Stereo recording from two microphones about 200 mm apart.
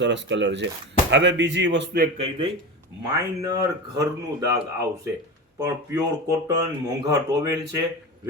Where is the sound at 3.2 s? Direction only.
15° right (ahead or behind).